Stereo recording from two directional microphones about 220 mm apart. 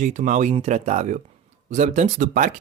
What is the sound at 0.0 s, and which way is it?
Speech, 35° right (ahead or behind).